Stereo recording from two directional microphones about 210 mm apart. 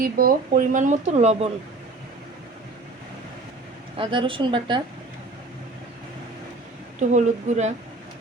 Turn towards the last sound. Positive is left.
turn(degrees=-35)  # may be behind; listen again after turning